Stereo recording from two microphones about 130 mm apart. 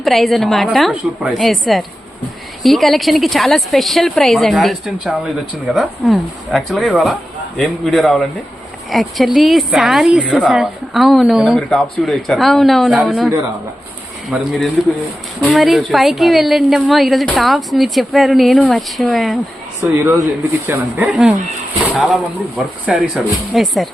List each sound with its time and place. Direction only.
0.0 s speech: centre (ahead or behind)
14.3 s speech: 10° right (ahead or behind)
15.4 s speech: 10° left (ahead or behind)
19.8 s speech: 15° right (ahead or behind); by 23.9 s centre (ahead or behind)